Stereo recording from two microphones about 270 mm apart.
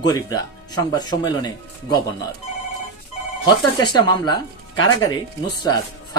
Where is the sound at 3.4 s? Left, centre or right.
Centre.